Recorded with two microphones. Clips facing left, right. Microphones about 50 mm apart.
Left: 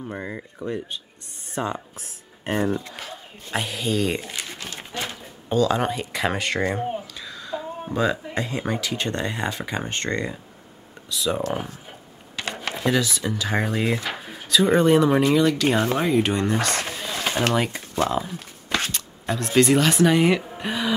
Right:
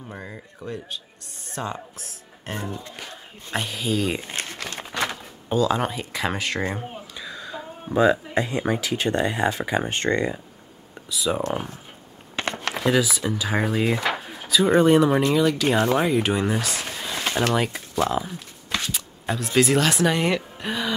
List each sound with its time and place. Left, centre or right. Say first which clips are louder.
0.0 s speech: left 5 dB; centre
3.0 s speech: left 2 dB; centre
4.6 s speech: right 4 dB; right
5.5 s speech: left 1 dB; centre
7.2 s a sound: left 2 dB; centre
8.6 s speech: right 2 dB; centre
11.1 s speech: even; centre
12.4 s a sound: right 3 dB; right
12.8 s speech: right 1 dB; centre
16.6 s a sound: left 3 dB; centre
18.0 s speech: left 1 dB; centre